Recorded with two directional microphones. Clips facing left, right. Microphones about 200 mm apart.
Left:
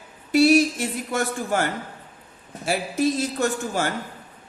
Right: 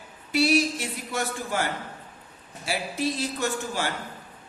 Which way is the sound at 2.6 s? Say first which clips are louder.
Left 6 dB; 45° left (ahead or behind).